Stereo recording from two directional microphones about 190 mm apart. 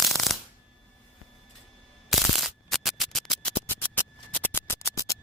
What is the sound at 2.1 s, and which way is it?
Music, centre (ahead or behind).